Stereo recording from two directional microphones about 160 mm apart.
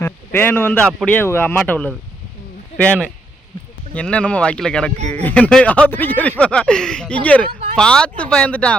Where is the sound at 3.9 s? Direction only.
5° left (ahead or behind).